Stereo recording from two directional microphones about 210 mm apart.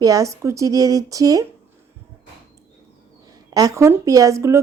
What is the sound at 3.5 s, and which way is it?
A woman's voice, 15° right (ahead or behind).